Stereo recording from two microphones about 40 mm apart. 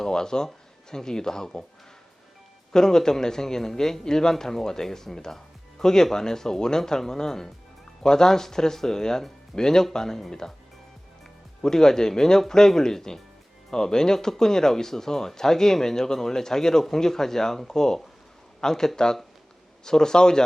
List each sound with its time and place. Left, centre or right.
0.0 s speech: centre
2.7 s speech: centre
11.6 s speech: centre